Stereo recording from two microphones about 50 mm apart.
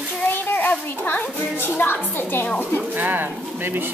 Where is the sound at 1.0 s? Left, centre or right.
Left.